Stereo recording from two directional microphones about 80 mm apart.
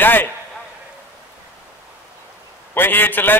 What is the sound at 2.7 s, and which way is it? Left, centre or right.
Speech, left.